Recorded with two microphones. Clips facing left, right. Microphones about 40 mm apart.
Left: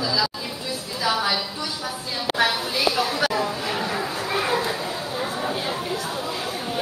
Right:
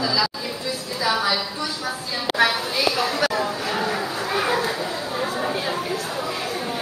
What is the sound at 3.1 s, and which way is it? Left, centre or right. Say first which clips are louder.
Chatter: right 1 dB; centre.